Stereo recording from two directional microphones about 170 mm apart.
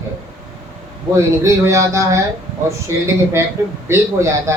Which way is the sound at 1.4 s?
15° right (ahead or behind).